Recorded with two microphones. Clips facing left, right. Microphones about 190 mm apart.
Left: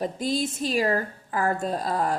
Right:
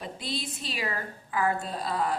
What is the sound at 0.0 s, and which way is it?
A woman's voice, 45° left (ahead or behind).